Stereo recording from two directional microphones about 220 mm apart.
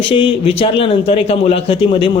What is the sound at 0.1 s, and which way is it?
Speech, 25° left (ahead or behind).